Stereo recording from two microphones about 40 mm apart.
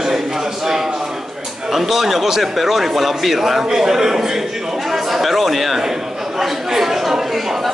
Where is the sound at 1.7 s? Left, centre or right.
Centre.